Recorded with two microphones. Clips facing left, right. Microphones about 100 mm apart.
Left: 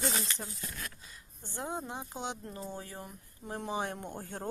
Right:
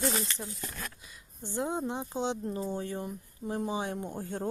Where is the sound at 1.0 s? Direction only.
15° right (ahead or behind).